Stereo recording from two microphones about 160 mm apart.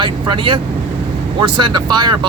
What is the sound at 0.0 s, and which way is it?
Speech, 35° right (ahead or behind).